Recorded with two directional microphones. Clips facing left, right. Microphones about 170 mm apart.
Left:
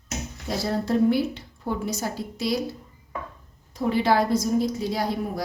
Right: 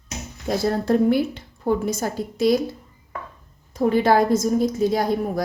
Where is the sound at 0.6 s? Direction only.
55° right (ahead or behind).